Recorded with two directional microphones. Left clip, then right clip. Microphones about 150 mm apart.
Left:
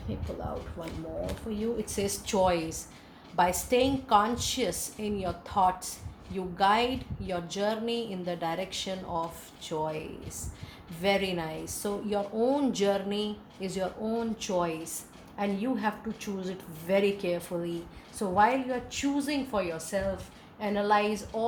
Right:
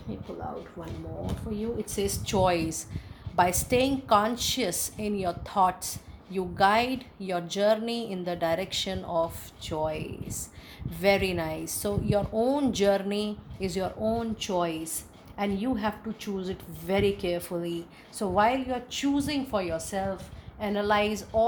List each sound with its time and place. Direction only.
1.8 s a woman's voice: 50° right (ahead or behind)